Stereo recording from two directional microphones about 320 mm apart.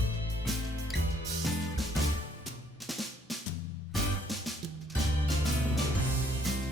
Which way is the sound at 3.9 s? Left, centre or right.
Centre.